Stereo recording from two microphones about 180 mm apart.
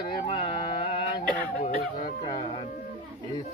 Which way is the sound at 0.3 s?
30° left (ahead or behind).